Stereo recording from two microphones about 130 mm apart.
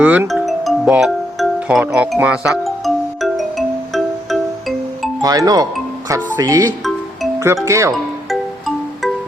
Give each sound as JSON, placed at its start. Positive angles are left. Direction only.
{"t": 0.0, "sound": "speech", "side_deg": -10}
{"t": 0.3, "sound": "music", "side_deg": 0}
{"t": 5.2, "sound": "speech", "side_deg": -30}